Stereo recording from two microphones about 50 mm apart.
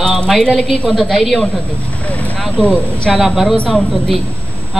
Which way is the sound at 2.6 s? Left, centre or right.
Left.